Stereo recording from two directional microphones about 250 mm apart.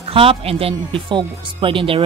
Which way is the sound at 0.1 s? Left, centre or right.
Right.